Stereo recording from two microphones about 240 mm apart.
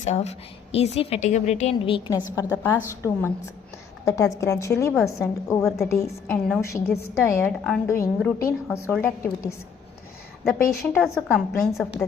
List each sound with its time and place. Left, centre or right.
0.0 s a woman's voice: left; by 11.0 s centre
11.0 s a woman's voice: centre